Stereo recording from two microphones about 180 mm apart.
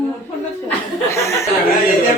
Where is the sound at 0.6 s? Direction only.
15° left (ahead or behind).